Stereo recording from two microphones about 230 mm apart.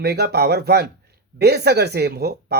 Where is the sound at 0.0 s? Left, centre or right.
Right.